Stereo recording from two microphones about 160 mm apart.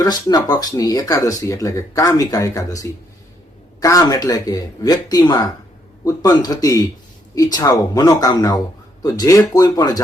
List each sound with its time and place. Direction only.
0.0 s speech: 25° left (ahead or behind)